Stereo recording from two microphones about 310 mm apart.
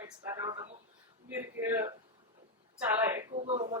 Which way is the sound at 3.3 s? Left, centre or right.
Centre.